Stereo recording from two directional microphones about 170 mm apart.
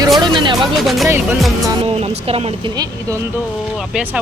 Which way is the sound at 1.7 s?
35° right (ahead or behind).